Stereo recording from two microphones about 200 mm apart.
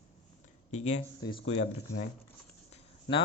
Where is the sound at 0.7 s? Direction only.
35° left (ahead or behind).